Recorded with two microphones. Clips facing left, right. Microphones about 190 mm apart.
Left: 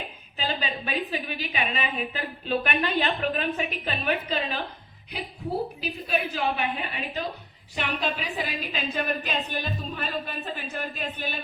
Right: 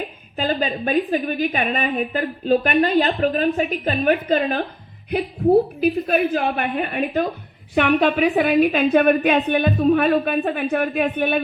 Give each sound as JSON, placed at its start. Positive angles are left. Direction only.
{"t": 0.3, "sound": "a woman's voice", "side_deg": -50}